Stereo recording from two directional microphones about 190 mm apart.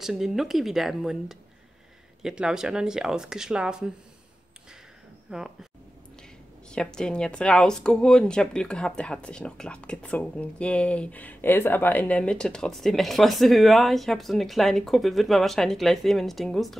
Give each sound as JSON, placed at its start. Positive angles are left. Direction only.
{"t": 0.0, "sound": "a woman's voice", "side_deg": 0}
{"t": 5.3, "sound": "a woman's voice", "side_deg": -5}
{"t": 6.7, "sound": "a woman's voice", "side_deg": 5}